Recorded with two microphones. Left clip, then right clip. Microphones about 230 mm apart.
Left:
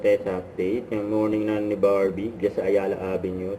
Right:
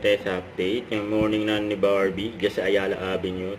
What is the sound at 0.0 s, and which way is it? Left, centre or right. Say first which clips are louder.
Speech: left 1 dB; centre.